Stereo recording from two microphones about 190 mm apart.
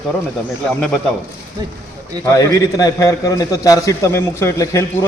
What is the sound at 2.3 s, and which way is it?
A man's voice, 20° left (ahead or behind).